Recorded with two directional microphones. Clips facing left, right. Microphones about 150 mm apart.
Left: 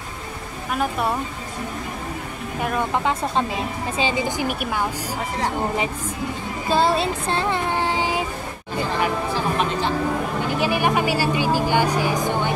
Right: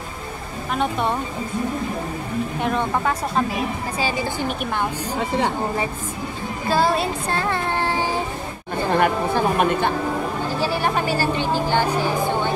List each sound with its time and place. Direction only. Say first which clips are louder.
0.7 s speech: right 1 dB; 5° left (ahead or behind)
2.6 s a woman's voice: left 1 dB; 5° left (ahead or behind)
3.1 s a woman's voice: even; 25° left (ahead or behind)
6.7 s child singing: even; 25° left (ahead or behind)
8.8 s a sound: right 4 dB; 55° right (ahead or behind)
10.4 s a woman's voice: left 2 dB; 15° left (ahead or behind)